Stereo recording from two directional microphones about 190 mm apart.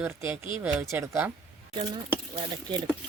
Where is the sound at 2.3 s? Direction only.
25° right (ahead or behind).